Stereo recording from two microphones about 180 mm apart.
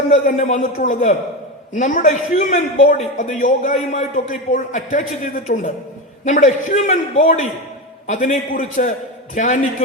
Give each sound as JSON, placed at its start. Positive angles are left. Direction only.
{"t": 0.1, "sound": "a man's voice", "side_deg": 40}